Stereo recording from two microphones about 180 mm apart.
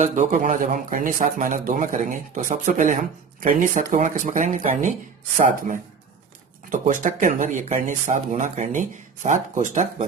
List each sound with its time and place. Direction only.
0.0 s speech: 45° right (ahead or behind)
6.7 s speech: 45° right (ahead or behind)